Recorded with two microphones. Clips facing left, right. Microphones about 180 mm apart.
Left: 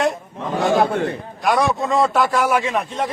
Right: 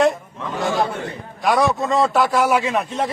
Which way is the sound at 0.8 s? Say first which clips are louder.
Left 4 dB; 60° left (ahead or behind).